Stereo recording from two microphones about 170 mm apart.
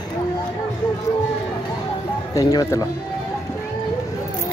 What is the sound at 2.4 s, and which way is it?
Speech, 20° left (ahead or behind).